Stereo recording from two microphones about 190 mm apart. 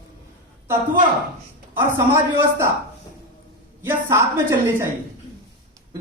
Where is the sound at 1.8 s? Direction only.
10° right (ahead or behind).